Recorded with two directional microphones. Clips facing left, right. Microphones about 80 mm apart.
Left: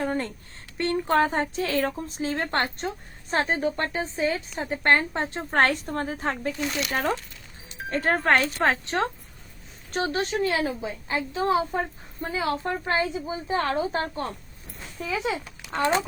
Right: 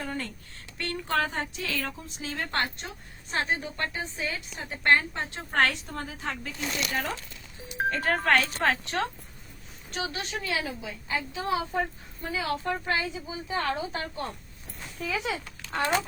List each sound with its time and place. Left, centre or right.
0.0 s a sound: left
0.8 s a woman's voice: left
9.9 s a woman's voice: left
15.7 s speech: left